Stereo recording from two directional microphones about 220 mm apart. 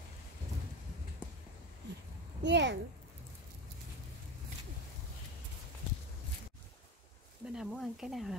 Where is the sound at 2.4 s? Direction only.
55° right (ahead or behind).